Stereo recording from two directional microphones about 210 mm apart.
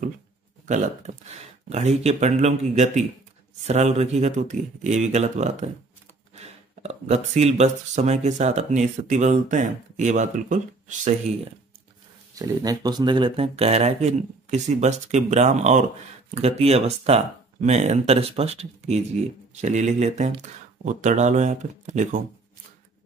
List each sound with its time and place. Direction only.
0.7 s speech: 35° right (ahead or behind)
12.4 s speech: 20° right (ahead or behind); by 22.2 s 35° right (ahead or behind)